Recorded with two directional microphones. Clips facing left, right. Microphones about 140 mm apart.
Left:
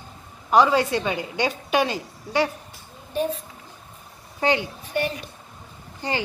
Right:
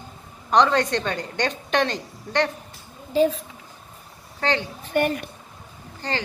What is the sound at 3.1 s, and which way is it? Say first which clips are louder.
Speech: right 6 dB; 90° right.